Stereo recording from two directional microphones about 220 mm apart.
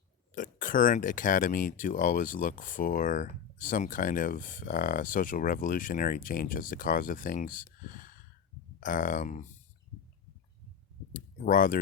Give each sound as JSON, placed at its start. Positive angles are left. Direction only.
{"t": 0.3, "sound": "speech", "side_deg": 35}
{"t": 11.1, "sound": "speech", "side_deg": 40}